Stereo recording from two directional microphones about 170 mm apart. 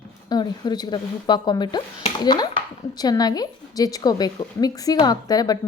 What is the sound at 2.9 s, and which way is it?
A woman's voice, 25° left (ahead or behind).